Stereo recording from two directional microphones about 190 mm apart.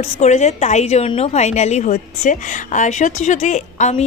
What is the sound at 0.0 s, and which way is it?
A woman's voice, 35° left (ahead or behind).